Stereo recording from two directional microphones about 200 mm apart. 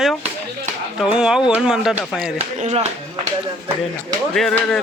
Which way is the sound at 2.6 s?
35° right (ahead or behind).